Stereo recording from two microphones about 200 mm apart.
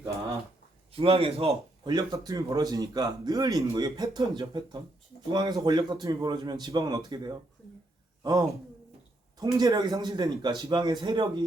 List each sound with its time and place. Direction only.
0.9 s a man's voice: 25° right (ahead or behind)